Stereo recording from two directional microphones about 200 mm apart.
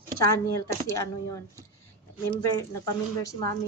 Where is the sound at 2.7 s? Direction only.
15° left (ahead or behind).